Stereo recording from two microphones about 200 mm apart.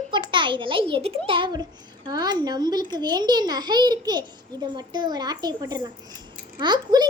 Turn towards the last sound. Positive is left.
turn(degrees=-20)  # may be behind; listen again after turning